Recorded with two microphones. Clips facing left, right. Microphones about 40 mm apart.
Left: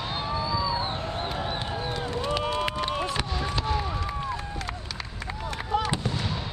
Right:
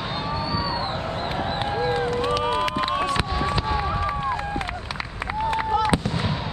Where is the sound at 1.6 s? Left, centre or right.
Right.